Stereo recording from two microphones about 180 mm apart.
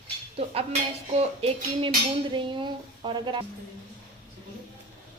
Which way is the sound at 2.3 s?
25° right (ahead or behind).